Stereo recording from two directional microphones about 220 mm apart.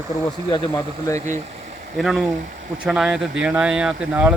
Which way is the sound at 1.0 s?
15° left (ahead or behind).